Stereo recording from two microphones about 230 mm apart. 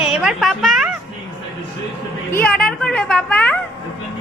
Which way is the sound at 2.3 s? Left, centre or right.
Centre.